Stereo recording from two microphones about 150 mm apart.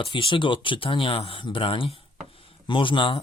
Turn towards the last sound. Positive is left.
turn(degrees=35)  # may be behind; listen again after turning